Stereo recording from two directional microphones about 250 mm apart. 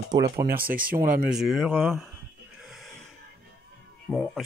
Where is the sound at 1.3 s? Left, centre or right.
Centre.